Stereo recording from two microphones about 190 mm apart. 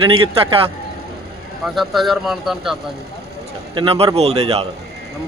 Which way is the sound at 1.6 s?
Centre (ahead or behind).